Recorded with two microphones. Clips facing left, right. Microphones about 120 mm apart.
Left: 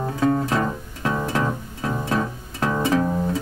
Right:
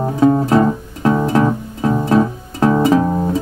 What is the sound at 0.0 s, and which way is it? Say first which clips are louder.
Music: right 7 dB; 30° right (ahead or behind).